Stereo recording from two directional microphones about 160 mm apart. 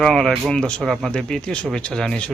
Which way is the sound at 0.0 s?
Centre (ahead or behind).